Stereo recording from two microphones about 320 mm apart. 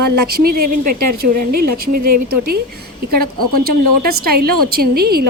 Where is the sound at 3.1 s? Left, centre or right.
Right.